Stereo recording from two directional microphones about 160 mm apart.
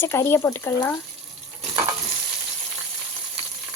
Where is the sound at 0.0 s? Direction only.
15° left (ahead or behind).